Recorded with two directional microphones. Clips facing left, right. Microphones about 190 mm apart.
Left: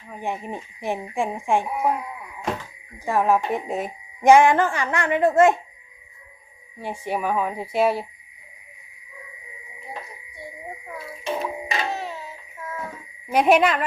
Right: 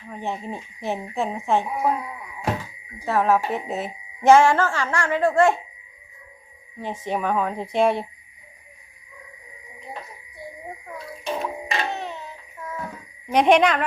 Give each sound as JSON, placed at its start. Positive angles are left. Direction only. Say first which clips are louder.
{"t": 0.1, "sound": "speech", "louder": "even", "side_deg": 10}
{"t": 3.1, "sound": "speech", "louder": "even", "side_deg": 15}
{"t": 6.7, "sound": "speech", "louder": "even", "side_deg": 10}
{"t": 10.9, "sound": "child singing", "louder": "left 1 dB", "side_deg": 5}